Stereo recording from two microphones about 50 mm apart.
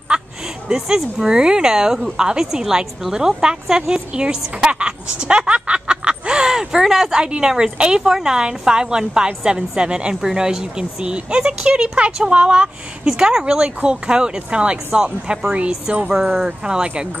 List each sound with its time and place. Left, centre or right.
0.7 s a woman's voice: centre